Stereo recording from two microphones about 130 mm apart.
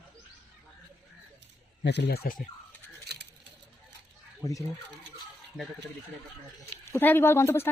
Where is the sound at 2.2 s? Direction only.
90° left.